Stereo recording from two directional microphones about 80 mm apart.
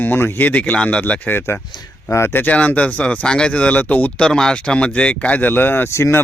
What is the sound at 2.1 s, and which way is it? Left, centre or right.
Speech, left.